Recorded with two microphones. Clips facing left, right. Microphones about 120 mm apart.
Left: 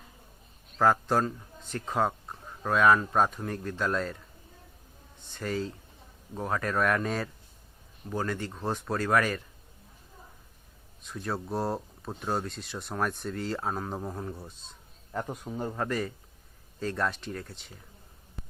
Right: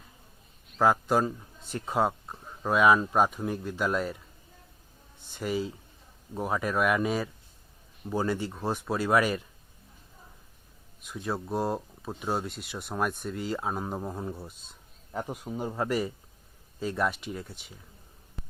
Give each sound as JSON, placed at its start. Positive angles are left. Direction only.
{"t": 0.8, "sound": "speech", "side_deg": -5}
{"t": 5.3, "sound": "speech", "side_deg": -10}
{"t": 9.0, "sound": "speech", "side_deg": -15}
{"t": 11.0, "sound": "speech", "side_deg": -5}